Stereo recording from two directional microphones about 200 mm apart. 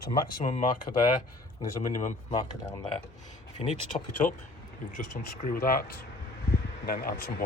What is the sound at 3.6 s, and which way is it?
Speech, 30° left (ahead or behind).